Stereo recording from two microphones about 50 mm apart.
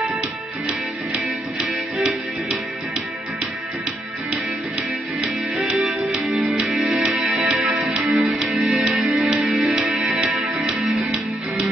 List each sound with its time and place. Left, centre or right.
1.6 s music: centre
5.6 s music: centre
6.7 s music: centre
7.2 s music: centre
8.1 s music: centre
8.4 s music: centre